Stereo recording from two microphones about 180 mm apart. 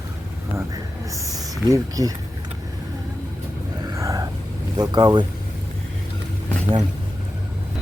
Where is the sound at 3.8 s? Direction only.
20° right (ahead or behind).